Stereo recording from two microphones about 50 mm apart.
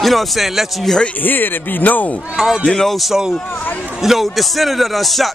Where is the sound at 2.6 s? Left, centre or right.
Centre.